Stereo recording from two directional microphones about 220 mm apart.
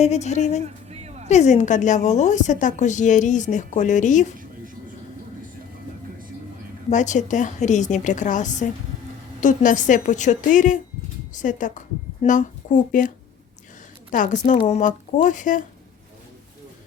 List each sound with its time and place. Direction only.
0.0 s a woman's voice: 30° left (ahead or behind)
0.6 s a sound: 30° right (ahead or behind)
1.3 s a woman's voice: 30° left (ahead or behind)
6.9 s a woman's voice: 35° left (ahead or behind)
14.1 s a woman's voice: 35° left (ahead or behind)